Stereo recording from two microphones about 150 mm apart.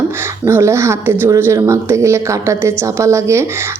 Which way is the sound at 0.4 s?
20° right (ahead or behind).